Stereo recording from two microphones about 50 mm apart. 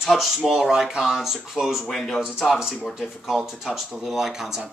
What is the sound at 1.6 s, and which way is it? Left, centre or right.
Speech, right.